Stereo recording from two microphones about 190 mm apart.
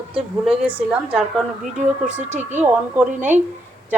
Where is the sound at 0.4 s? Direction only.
5° right (ahead or behind).